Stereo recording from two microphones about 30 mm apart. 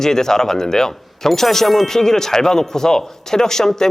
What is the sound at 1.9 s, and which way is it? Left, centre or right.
Speech, centre.